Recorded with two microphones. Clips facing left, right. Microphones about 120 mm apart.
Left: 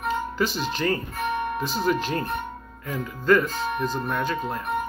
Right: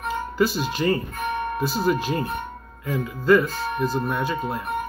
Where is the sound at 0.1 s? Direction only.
5° right (ahead or behind).